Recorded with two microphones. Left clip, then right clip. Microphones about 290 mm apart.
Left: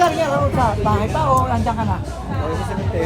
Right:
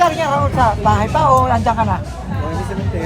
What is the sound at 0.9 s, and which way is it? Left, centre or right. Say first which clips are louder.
Speech: right 5 dB; right.